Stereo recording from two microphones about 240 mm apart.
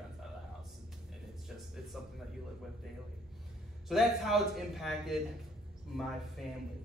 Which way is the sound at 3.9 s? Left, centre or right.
Centre.